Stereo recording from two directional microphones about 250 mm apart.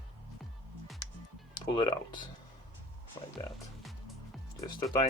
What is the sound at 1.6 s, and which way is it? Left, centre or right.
Speech, centre.